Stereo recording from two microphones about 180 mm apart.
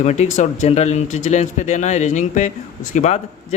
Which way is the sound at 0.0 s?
40° left (ahead or behind).